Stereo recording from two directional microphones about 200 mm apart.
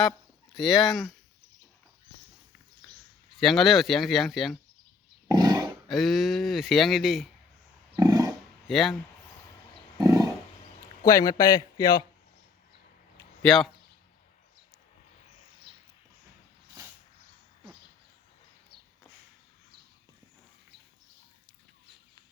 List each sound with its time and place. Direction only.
0.5 s speech: centre (ahead or behind)
3.4 s speech: centre (ahead or behind)
5.3 s wild animals: 20° right (ahead or behind)
5.9 s speech: centre (ahead or behind)
7.9 s roaring cats: 20° right (ahead or behind)
8.6 s speech: centre (ahead or behind)
10.0 s a sound: 15° right (ahead or behind)
11.0 s a man's voice: 15° left (ahead or behind)
13.4 s speech: 5° left (ahead or behind)